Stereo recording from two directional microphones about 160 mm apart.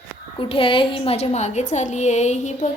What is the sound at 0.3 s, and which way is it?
A woman's voice, 35° left (ahead or behind).